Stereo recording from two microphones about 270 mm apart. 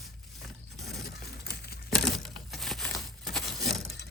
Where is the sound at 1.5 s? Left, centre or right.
Left.